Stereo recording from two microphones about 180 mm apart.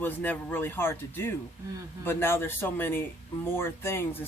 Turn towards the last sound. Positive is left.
turn(degrees=10)  # may be behind; listen again after turning